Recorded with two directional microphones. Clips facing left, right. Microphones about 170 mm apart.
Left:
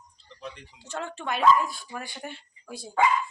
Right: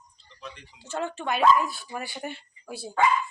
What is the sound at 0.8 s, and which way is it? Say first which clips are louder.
Speech: right 3 dB; 5° right (ahead or behind).